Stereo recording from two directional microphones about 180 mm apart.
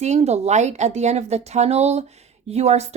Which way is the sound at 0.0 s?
40° right (ahead or behind).